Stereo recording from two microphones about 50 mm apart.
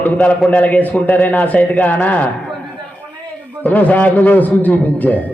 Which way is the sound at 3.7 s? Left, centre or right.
Left.